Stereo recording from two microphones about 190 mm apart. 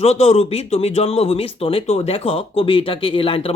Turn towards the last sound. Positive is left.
turn(degrees=30)  # may be behind; listen again after turning